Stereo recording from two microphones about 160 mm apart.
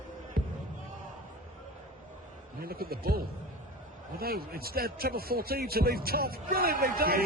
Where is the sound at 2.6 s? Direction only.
70° right (ahead or behind).